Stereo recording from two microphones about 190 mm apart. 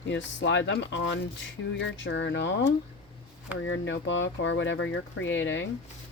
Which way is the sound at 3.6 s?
75° left (ahead or behind).